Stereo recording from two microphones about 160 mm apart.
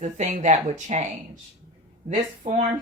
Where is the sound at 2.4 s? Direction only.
50° right (ahead or behind).